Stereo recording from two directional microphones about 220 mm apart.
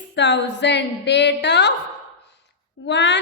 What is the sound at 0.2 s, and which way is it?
A woman's voice, 55° left (ahead or behind).